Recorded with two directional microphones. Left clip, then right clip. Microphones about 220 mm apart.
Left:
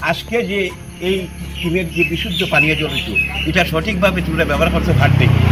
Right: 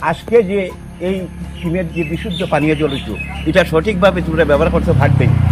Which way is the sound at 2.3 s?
20° right (ahead or behind).